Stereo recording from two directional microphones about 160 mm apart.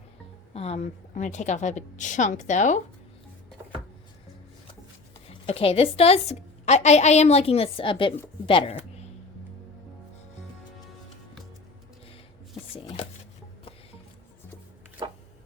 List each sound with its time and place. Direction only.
0.5 s a woman's voice: 40° left (ahead or behind)
5.5 s a woman's voice: 40° left (ahead or behind)
8.4 s a sound: 35° left (ahead or behind)
12.7 s chopping: 35° left (ahead or behind)